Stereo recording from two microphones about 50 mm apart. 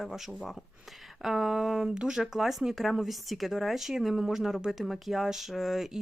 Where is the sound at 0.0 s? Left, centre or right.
Centre.